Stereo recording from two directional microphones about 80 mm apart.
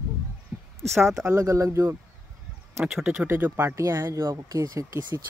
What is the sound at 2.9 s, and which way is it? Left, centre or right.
Speech, centre.